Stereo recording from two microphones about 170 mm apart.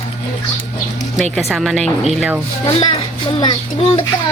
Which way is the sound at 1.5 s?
Centre (ahead or behind).